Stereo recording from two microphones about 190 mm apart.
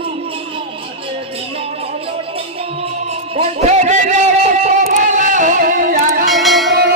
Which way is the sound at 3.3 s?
35° right (ahead or behind).